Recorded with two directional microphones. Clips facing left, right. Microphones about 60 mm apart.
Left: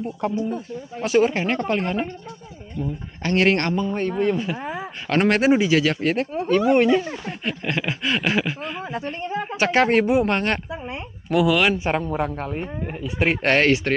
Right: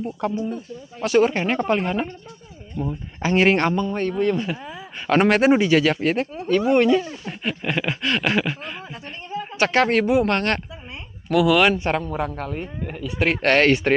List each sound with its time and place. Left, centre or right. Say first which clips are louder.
0.2 s speech: left 1 dB; centre
3.7 s speech: even; centre
4.6 s a sound: left 6 dB; left
5.0 s speech: right 2 dB; centre
6.7 s speech: right 1 dB; centre
7.2 s speech: even; centre
9.2 s speech: even; left
9.6 s speech: even; centre